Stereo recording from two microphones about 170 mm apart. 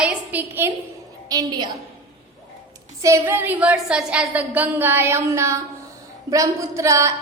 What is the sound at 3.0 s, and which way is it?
A woman's voice, 15° right (ahead or behind).